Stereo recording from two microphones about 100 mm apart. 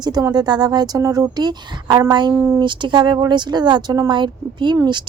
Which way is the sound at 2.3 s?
20° right (ahead or behind).